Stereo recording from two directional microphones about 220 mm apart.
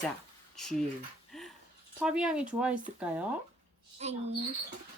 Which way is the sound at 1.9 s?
5° right (ahead or behind).